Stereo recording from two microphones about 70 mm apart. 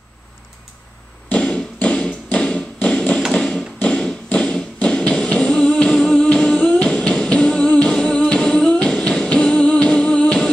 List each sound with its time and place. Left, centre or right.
1.3 s tap: centre